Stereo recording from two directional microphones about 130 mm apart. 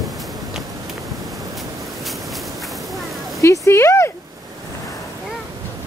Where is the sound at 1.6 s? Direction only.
Centre (ahead or behind).